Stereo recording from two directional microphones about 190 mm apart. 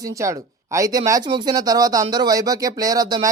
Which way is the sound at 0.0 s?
15° right (ahead or behind).